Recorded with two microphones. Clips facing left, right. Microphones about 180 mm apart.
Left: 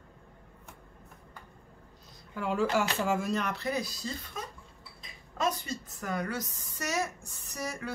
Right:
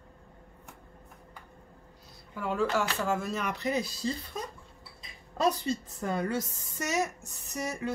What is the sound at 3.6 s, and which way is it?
Speech, 20° right (ahead or behind).